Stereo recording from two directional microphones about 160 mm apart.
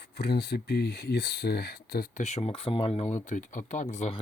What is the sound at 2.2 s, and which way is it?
Speech, 40° left (ahead or behind).